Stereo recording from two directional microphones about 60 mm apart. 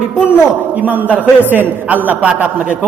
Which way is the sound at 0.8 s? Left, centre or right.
Right.